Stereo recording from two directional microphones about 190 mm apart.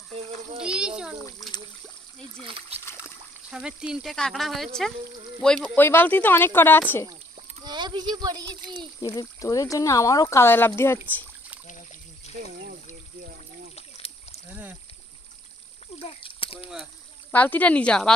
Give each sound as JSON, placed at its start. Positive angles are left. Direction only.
{"t": 0.6, "sound": "a sound", "side_deg": -5}
{"t": 2.4, "sound": "a child's voice", "side_deg": -30}
{"t": 3.0, "sound": "speech", "side_deg": -5}
{"t": 7.6, "sound": "a child's voice", "side_deg": -25}
{"t": 9.0, "sound": "speech", "side_deg": 20}
{"t": 13.7, "sound": "rowboat", "side_deg": 35}
{"t": 16.0, "sound": "a sound", "side_deg": 30}
{"t": 17.3, "sound": "speech", "side_deg": 10}